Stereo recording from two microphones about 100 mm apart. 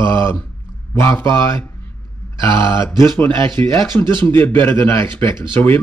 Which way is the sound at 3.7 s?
25° left (ahead or behind).